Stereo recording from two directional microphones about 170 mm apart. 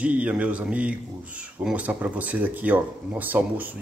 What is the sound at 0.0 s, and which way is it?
Speech, 10° right (ahead or behind).